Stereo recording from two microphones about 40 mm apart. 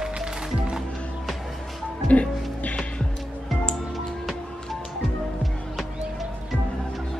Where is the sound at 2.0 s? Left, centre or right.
Left.